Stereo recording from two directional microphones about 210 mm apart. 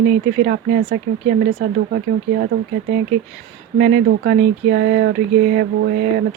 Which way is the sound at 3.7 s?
50° right (ahead or behind).